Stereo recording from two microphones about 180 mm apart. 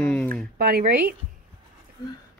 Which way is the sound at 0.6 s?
55° right (ahead or behind).